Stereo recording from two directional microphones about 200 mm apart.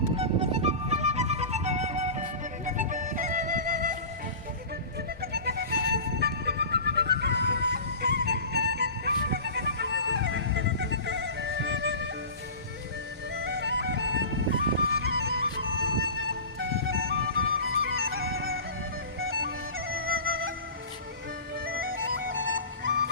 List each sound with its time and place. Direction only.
0.2 s music: 30° right (ahead or behind)
5.2 s music: 50° right (ahead or behind)
13.4 s music: 60° right (ahead or behind)
17.2 s music: 90° right
17.7 s music: 50° right (ahead or behind)
18.2 s music: 90° right
19.3 s music: 50° right (ahead or behind)
20.1 s music: 85° right
22.1 s music: 70° right (ahead or behind)